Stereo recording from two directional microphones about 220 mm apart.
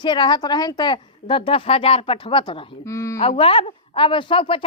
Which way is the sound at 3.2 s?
25° left (ahead or behind).